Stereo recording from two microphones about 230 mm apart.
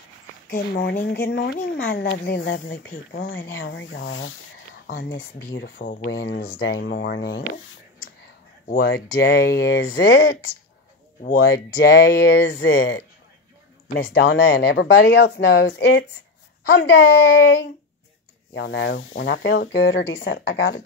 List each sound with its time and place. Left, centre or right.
0.5 s speech: left
4.8 s speech: left
5.8 s speech: left
7.5 s a sound: left
8.6 s speech: left
11.2 s speech: left
18.5 s speech: left